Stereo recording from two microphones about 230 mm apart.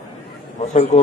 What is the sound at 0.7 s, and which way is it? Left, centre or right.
Speech, left.